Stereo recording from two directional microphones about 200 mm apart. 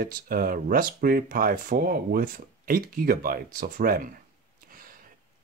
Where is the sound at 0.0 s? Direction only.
45° right (ahead or behind).